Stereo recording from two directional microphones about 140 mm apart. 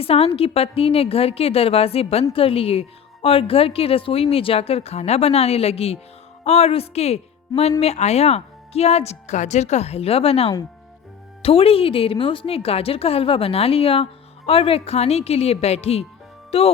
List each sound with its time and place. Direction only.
0.0 s a woman's voice: 45° left (ahead or behind)